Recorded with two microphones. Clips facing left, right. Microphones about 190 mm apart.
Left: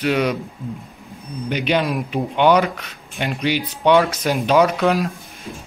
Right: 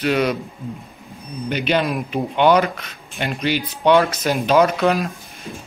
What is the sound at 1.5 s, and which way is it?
Speech, 15° left (ahead or behind).